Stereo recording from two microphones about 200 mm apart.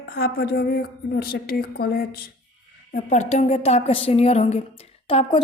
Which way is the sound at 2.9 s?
35° left (ahead or behind).